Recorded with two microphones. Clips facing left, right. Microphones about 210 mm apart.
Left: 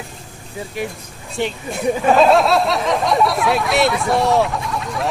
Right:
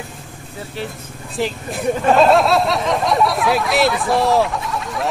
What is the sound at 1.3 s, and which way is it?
Speech, centre (ahead or behind).